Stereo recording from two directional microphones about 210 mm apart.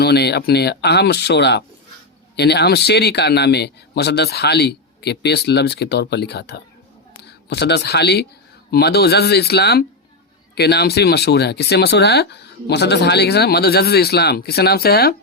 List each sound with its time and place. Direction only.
0.0 s speech: 50° left (ahead or behind)